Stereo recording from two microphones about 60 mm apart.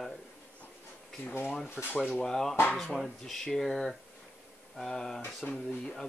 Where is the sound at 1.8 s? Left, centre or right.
Centre.